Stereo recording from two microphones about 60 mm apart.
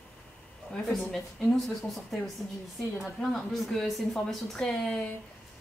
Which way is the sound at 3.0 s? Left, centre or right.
Centre.